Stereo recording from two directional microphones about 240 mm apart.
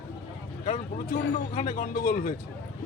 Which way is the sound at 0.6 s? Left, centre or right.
Left.